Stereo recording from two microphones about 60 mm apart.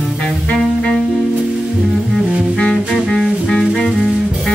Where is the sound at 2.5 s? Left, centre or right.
Centre.